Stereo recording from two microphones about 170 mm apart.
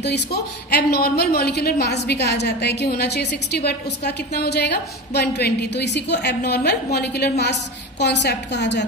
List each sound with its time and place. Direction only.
0.0 s a woman's voice: 75° left (ahead or behind)
8.0 s a woman's voice: 85° left